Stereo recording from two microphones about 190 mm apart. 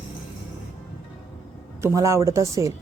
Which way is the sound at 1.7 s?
15° right (ahead or behind).